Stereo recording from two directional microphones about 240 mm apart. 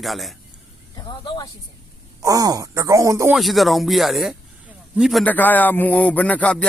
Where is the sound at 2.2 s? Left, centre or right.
Centre.